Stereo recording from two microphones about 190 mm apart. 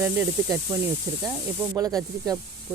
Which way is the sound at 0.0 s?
10° right (ahead or behind).